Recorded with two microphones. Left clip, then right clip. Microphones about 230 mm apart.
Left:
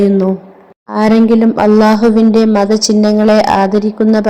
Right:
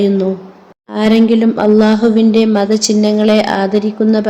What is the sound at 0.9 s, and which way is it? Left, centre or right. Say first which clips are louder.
A woman's voice: left 2 dB; centre.